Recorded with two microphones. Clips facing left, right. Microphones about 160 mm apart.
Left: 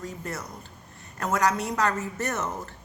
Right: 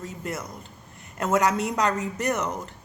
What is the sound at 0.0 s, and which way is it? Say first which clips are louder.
A woman's voice: right 2 dB; 20° right (ahead or behind).